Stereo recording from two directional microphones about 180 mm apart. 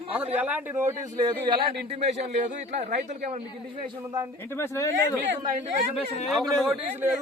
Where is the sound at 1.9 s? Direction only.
40° right (ahead or behind).